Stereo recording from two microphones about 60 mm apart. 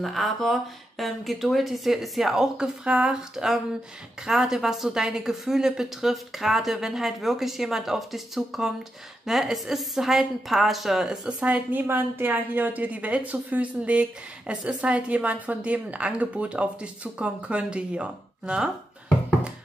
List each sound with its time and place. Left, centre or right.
0.0 s a woman's voice: centre
11.2 s a woman's voice: centre
11.7 s a woman's voice: right; by 18.7 s centre